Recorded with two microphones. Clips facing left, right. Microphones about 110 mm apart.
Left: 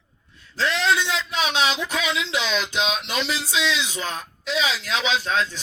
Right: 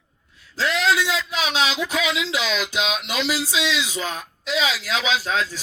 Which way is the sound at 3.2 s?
5° right (ahead or behind).